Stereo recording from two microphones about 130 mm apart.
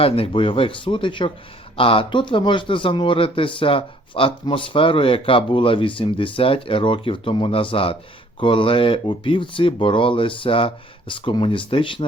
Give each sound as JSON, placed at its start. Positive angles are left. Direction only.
{"t": 0.0, "sound": "speech", "side_deg": 45}